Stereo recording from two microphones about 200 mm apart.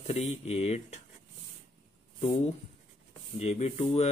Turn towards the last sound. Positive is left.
turn(degrees=30)  # may be behind; listen again after turning